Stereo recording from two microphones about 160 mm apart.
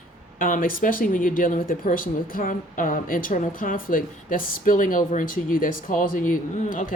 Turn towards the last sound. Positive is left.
turn(degrees=55)  # may be behind; listen again after turning